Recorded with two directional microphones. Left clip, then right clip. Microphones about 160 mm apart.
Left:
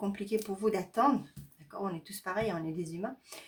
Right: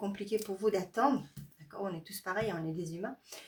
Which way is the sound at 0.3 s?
30° left (ahead or behind).